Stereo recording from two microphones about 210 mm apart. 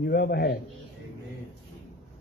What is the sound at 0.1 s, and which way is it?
Speech, 50° left (ahead or behind).